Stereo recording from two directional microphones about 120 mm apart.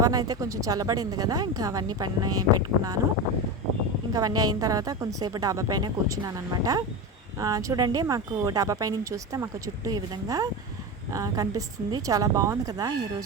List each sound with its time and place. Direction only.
0.0 s a woman's voice: 30° right (ahead or behind)
4.1 s a woman's voice: 30° right (ahead or behind)